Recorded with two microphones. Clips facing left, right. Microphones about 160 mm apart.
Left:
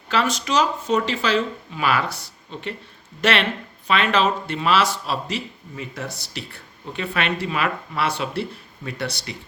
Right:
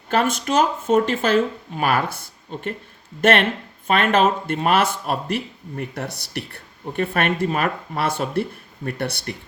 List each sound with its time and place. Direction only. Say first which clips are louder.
0.1 s a man's voice: right 2 dB; 55° right (ahead or behind)